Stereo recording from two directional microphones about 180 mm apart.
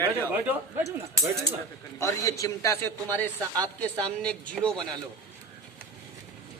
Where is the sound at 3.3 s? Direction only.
20° right (ahead or behind).